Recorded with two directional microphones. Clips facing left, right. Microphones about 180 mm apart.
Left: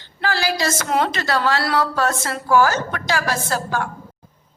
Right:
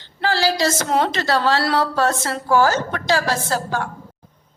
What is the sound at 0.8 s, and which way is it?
A woman's voice, 25° right (ahead or behind).